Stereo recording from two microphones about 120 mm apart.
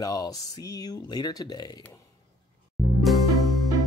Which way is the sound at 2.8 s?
Centre (ahead or behind).